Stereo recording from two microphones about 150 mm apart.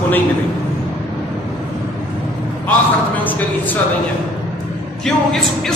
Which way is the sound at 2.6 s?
10° left (ahead or behind).